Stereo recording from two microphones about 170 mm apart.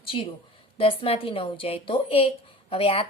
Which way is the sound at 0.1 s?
35° left (ahead or behind).